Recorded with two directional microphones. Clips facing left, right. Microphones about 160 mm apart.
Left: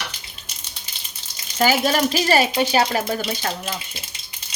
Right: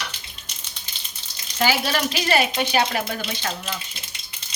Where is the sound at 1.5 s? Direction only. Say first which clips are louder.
Left 4 dB; 40° left (ahead or behind).